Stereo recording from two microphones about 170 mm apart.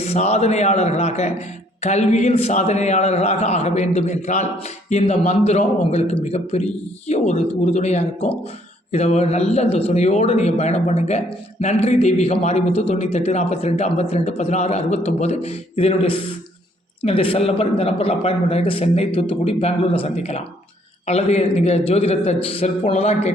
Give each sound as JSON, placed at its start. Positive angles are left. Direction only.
{"t": 0.0, "sound": "a man's voice", "side_deg": 40}